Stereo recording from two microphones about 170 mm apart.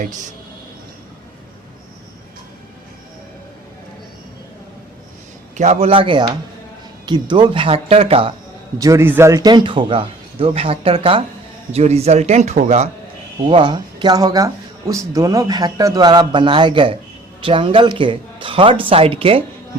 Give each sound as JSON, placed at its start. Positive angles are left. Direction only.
{"t": 5.5, "sound": "speech", "side_deg": -40}
{"t": 8.8, "sound": "speech", "side_deg": -15}
{"t": 13.5, "sound": "speech", "side_deg": -30}